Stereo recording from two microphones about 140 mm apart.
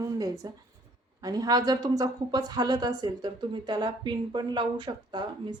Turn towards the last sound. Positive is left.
turn(degrees=-35)  # may be behind; listen again after turning